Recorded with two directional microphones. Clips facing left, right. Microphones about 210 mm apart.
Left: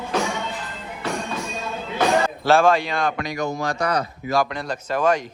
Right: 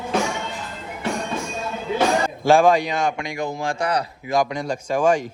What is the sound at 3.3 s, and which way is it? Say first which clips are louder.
Speech: left 1 dB; 30° right (ahead or behind).